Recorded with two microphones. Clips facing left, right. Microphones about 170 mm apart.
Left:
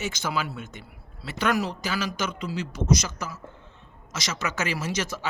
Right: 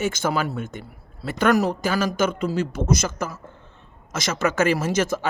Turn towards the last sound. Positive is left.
turn(degrees=-50)  # may be behind; listen again after turning